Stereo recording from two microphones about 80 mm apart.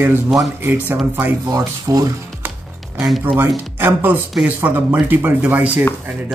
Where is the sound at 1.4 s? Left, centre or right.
Right.